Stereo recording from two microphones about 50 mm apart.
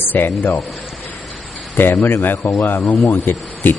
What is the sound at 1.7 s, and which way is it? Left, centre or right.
Speech, left.